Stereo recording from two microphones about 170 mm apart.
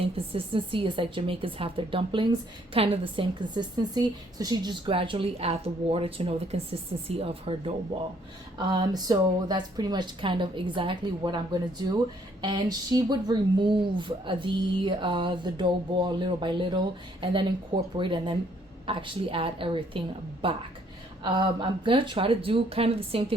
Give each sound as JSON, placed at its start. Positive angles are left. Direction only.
{"t": 0.0, "sound": "a woman's voice", "side_deg": -30}